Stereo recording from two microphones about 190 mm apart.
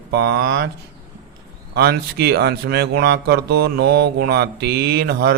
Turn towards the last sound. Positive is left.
turn(degrees=-55)  # may be behind; listen again after turning